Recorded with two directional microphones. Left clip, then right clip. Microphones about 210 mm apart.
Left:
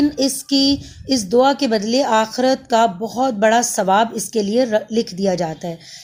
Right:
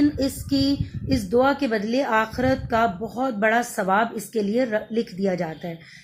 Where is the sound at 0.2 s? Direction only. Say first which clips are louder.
Left 6 dB; 45° left (ahead or behind).